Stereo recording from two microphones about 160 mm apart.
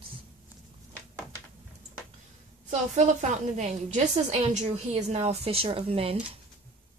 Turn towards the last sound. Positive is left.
turn(degrees=-35)  # may be behind; listen again after turning